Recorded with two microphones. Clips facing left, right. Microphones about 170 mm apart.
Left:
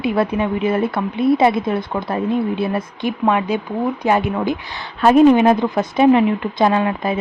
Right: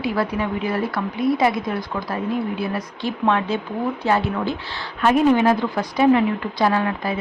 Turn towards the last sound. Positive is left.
turn(degrees=20)  # may be behind; listen again after turning